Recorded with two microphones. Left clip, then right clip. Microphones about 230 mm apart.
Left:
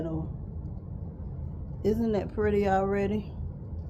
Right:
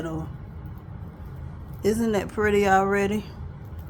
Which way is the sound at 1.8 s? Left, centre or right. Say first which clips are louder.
Right 4 dB; right.